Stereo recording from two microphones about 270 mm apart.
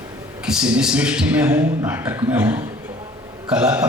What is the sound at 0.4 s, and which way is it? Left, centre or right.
A man's voice, centre.